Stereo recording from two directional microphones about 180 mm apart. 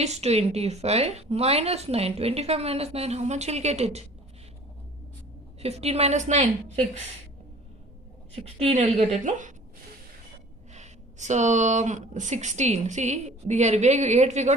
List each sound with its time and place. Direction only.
0.0 s a woman's voice: 35° right (ahead or behind)
5.5 s a woman's voice: 35° right (ahead or behind)
8.5 s a woman's voice: 35° right (ahead or behind)
10.7 s a woman's voice: 40° right (ahead or behind)